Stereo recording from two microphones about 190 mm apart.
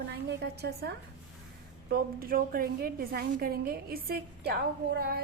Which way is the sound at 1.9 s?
50° right (ahead or behind).